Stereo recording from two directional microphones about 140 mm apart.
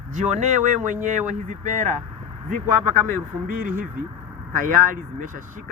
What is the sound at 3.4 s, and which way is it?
Speech, 80° right.